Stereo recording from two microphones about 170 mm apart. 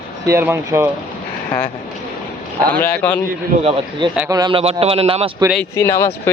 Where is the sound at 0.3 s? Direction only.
15° right (ahead or behind).